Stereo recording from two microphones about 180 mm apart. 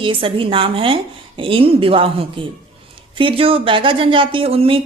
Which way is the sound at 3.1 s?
30° right (ahead or behind).